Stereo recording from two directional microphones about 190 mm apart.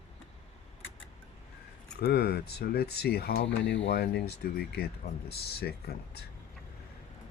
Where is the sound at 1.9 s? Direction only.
55° left (ahead or behind).